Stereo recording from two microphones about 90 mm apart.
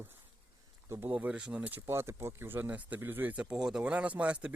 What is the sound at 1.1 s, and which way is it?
Speech, 15° right (ahead or behind).